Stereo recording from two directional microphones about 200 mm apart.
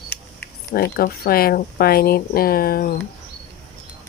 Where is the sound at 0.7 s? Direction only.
50° left (ahead or behind).